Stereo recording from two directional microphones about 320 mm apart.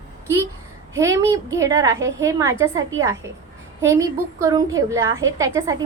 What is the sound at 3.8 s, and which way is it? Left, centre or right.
A woman's voice, centre.